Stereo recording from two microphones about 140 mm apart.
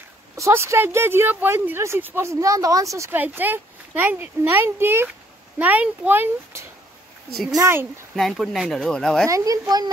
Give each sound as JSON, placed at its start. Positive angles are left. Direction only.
{"t": 0.4, "sound": "speech", "side_deg": -20}
{"t": 8.2, "sound": "speech", "side_deg": 0}
{"t": 9.3, "sound": "a woman's voice", "side_deg": -25}